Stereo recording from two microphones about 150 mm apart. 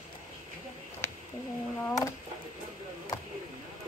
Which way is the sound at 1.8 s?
20° left (ahead or behind).